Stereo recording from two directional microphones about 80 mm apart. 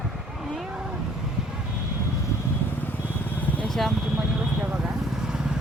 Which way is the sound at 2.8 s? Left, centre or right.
Left.